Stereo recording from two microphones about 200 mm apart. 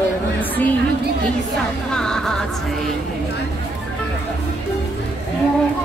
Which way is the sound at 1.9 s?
5° left (ahead or behind).